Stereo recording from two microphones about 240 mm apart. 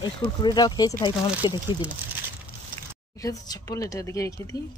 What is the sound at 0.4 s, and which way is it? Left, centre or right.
Speech, centre.